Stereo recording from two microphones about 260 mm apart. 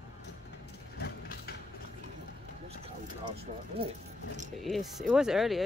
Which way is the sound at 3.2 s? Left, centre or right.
Right.